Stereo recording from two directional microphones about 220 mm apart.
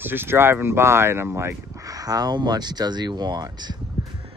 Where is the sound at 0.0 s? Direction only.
10° right (ahead or behind).